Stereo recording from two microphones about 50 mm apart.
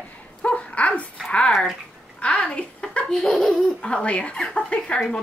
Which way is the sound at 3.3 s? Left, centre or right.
Centre.